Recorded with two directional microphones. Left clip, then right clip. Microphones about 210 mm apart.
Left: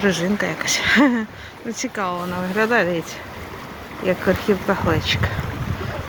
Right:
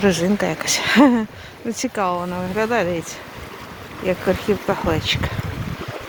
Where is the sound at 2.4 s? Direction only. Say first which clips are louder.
Left 5 dB; 10° right (ahead or behind).